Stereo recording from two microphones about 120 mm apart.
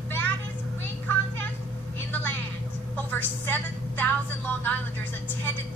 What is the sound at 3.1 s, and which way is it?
Vehicle, 15° left (ahead or behind).